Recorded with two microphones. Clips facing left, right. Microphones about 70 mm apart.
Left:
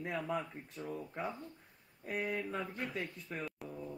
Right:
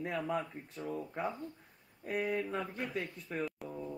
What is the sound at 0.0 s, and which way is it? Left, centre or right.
Speech, centre.